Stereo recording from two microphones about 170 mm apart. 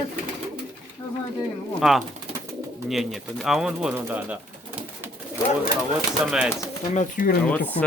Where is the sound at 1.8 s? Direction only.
Centre (ahead or behind).